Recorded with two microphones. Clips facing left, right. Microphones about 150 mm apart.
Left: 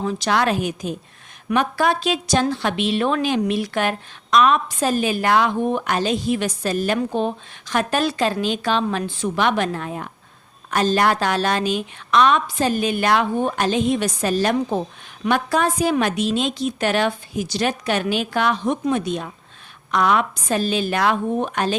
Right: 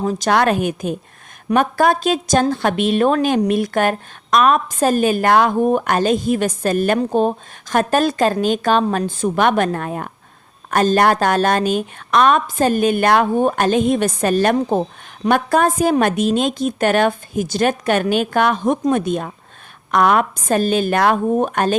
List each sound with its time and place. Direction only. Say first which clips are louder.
0.0 s a woman's voice: right 4 dB; 45° right (ahead or behind)